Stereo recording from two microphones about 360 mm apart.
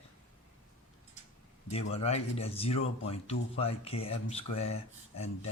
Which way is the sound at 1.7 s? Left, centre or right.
Centre.